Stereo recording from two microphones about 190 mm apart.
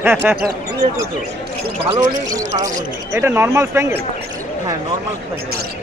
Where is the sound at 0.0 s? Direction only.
10° right (ahead or behind).